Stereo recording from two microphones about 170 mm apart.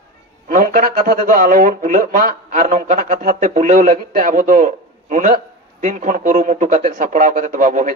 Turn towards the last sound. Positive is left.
turn(degrees=-50)  # may be behind; listen again after turning